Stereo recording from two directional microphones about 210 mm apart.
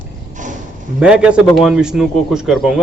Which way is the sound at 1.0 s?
5° right (ahead or behind).